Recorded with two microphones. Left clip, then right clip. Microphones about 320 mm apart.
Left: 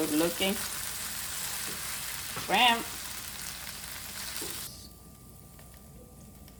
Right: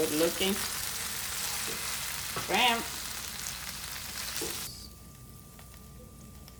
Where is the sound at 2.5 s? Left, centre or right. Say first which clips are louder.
Left 3 dB; centre.